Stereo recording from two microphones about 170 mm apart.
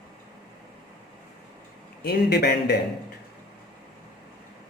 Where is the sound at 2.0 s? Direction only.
70° left (ahead or behind).